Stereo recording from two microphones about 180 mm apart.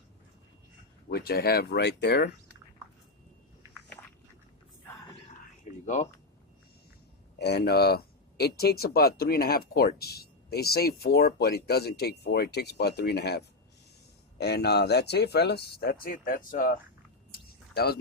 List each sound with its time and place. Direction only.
1.1 s speech: 60° left (ahead or behind)
5.8 s speech: 40° left (ahead or behind)
7.3 s speech: 65° left (ahead or behind); by 16.7 s 50° left (ahead or behind)
17.3 s a sound: 60° left (ahead or behind)